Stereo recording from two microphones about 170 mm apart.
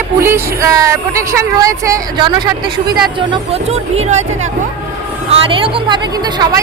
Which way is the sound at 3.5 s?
40° right (ahead or behind).